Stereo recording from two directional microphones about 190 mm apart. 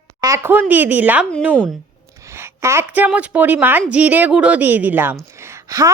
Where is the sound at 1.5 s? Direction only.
5° left (ahead or behind).